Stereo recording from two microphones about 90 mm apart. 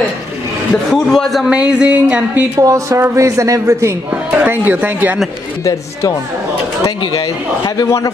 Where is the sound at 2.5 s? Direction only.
40° right (ahead or behind).